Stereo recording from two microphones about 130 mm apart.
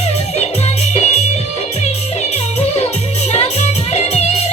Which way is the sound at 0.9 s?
60° left (ahead or behind).